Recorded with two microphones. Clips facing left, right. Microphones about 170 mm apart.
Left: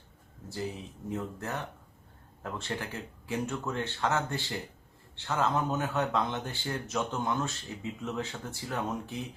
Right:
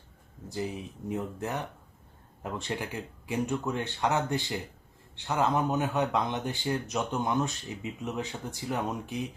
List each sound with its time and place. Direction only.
0.4 s speech: 15° right (ahead or behind)